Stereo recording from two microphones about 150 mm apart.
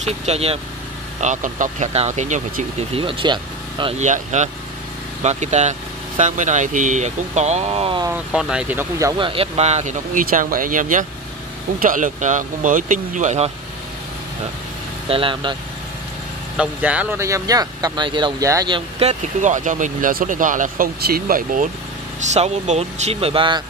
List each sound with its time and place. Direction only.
0.0 s speech: 45° right (ahead or behind)
1.2 s speech: 55° right (ahead or behind)
3.0 s speech: 35° right (ahead or behind)
4.0 s speech: 50° right (ahead or behind)
8.1 s speech: 5° right (ahead or behind)
9.2 s speech: 40° right (ahead or behind)
15.0 s speech: 35° right (ahead or behind)
16.5 s speech: 10° right (ahead or behind); by 18.8 s 25° right (ahead or behind)
18.9 s speech: 50° right (ahead or behind); by 21.6 s 65° right (ahead or behind)
22.2 s speech: 50° right (ahead or behind)